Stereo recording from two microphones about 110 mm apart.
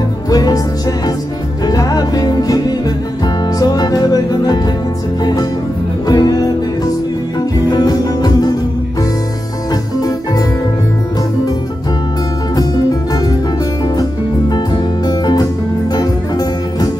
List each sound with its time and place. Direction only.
0.3 s music: 35° left (ahead or behind)
1.7 s music: 35° left (ahead or behind)
7.7 s music: 35° left (ahead or behind)
14.5 s music: 40° left (ahead or behind)